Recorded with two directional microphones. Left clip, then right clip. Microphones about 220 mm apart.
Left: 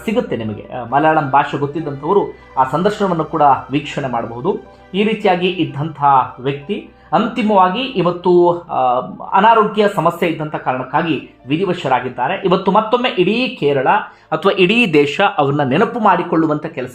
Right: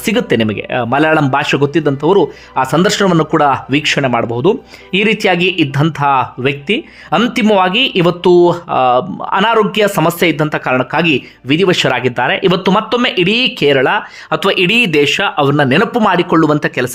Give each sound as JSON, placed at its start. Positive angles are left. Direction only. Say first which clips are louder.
{"t": 0.0, "sound": "speech", "louder": "right 5 dB", "side_deg": -25}